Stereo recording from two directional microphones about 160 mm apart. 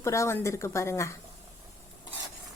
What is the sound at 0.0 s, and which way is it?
A woman's voice, 15° left (ahead or behind).